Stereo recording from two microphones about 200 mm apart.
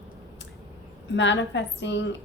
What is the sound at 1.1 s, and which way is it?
Speech, 60° left (ahead or behind).